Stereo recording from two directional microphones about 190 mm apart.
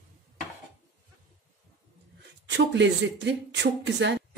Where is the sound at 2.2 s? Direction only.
70° right (ahead or behind).